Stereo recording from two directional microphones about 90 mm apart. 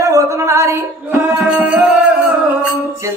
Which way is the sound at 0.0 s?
35° right (ahead or behind).